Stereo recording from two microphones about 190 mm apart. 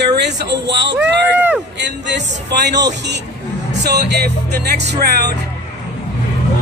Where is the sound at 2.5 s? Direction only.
65° right (ahead or behind).